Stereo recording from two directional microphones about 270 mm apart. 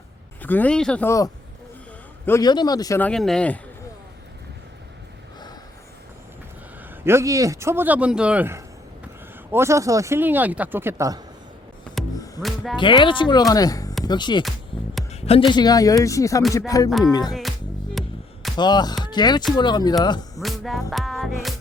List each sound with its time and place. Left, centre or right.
0.4 s a man's voice: centre
7.0 s speech: centre
12.0 s music: centre
12.7 s a man's voice: centre
18.0 s music: centre
18.5 s a man's voice: centre
20.4 s music: centre